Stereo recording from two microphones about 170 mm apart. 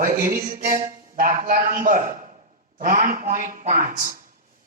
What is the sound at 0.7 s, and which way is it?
A man's voice, 50° right (ahead or behind).